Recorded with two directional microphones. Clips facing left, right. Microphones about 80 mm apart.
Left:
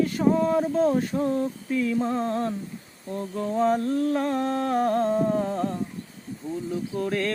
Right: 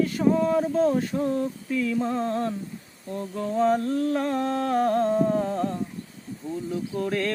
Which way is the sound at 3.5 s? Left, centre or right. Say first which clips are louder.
Even; centre.